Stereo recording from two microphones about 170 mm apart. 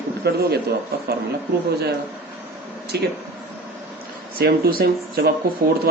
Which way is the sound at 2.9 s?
75° right (ahead or behind).